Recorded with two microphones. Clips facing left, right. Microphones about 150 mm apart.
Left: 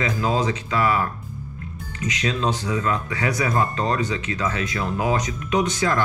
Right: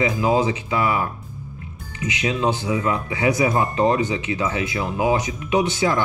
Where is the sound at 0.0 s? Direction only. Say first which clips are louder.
Right 3 dB; 20° right (ahead or behind).